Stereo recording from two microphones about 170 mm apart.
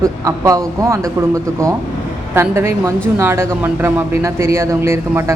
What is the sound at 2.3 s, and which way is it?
A woman's voice, 15° right (ahead or behind).